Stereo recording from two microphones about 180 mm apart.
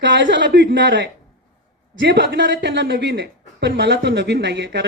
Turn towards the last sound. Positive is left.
turn(degrees=-65)  # may be behind; listen again after turning